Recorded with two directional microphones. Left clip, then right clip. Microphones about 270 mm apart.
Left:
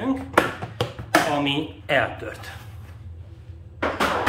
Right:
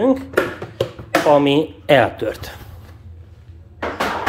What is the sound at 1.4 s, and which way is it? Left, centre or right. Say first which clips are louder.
Speech: right 9 dB; right.